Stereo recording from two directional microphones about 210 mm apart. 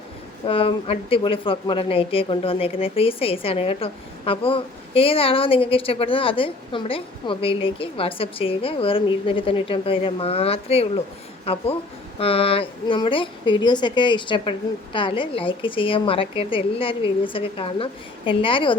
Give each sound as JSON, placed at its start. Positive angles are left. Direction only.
{"t": 0.4, "sound": "speech", "side_deg": 25}